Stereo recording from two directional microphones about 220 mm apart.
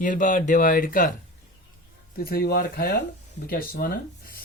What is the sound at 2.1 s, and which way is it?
Speech, 45° left (ahead or behind).